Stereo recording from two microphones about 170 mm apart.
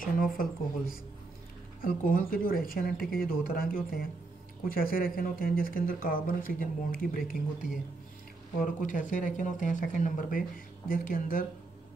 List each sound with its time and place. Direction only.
0.0 s speech: 55° left (ahead or behind)
1.8 s speech: 55° left (ahead or behind)